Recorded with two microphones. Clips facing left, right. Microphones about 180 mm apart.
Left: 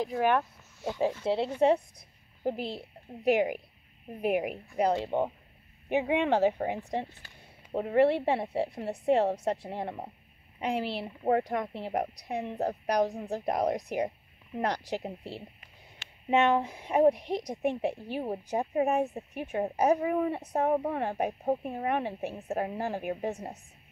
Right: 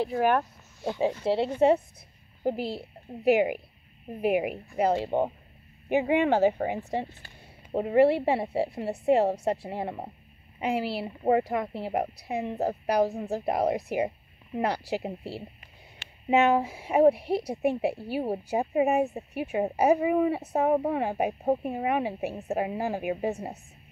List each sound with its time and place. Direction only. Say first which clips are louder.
0.0 s a woman's voice: right 2 dB; 5° right (ahead or behind)